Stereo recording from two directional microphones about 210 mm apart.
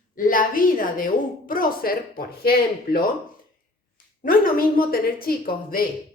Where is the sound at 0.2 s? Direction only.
40° left (ahead or behind).